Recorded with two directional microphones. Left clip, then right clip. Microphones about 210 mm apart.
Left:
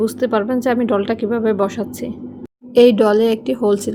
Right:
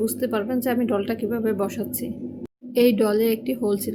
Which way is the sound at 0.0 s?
15° left (ahead or behind).